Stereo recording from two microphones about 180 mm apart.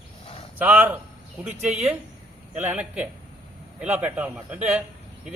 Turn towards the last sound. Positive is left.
turn(degrees=-10)  # may be behind; listen again after turning